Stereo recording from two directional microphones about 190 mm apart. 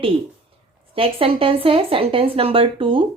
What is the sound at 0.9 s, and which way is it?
Speech, 30° right (ahead or behind).